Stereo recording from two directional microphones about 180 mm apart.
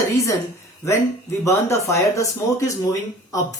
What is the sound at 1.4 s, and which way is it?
Speech, 15° left (ahead or behind).